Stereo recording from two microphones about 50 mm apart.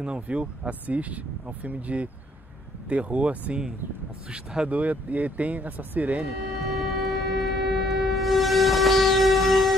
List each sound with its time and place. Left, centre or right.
0.0 s speech: right
4.6 s speech: right
6.6 s train: centre